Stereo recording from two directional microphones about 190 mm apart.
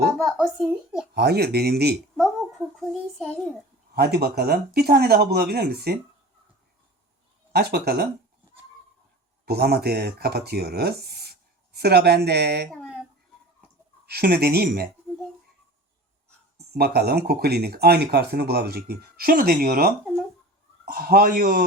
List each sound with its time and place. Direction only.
0.2 s speech: centre (ahead or behind)
1.1 s speech: 60° right (ahead or behind)
2.9 s a child's voice: 5° left (ahead or behind)
3.9 s speech: 55° right (ahead or behind)
7.5 s speech: 55° right (ahead or behind)
9.5 s speech: 55° right (ahead or behind)
12.7 s a sound: 5° left (ahead or behind)
14.1 s speech: 55° right (ahead or behind)
16.7 s a man's voice: 55° right (ahead or behind)